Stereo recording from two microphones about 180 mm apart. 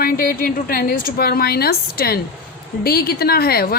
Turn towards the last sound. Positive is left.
turn(degrees=60)  # may be behind; listen again after turning